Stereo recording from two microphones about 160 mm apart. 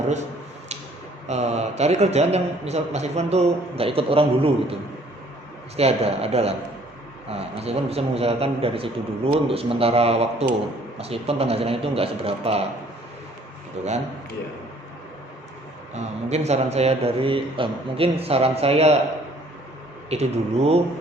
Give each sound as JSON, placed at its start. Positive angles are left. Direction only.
{"t": 1.3, "sound": "a man's voice", "side_deg": -45}
{"t": 5.7, "sound": "a man's voice", "side_deg": -40}
{"t": 13.8, "sound": "a man's voice", "side_deg": -45}
{"t": 16.0, "sound": "a man's voice", "side_deg": -45}
{"t": 20.1, "sound": "a man's voice", "side_deg": -40}